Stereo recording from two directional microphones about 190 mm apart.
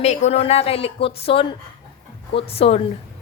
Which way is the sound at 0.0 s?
35° left (ahead or behind).